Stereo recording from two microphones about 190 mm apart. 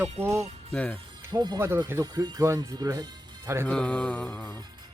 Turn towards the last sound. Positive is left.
turn(degrees=10)  # may be behind; listen again after turning